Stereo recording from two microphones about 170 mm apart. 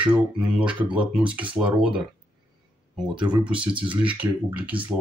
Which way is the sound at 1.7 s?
30° right (ahead or behind).